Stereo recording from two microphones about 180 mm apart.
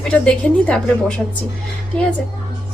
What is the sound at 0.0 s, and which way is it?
A woman's voice, 5° left (ahead or behind).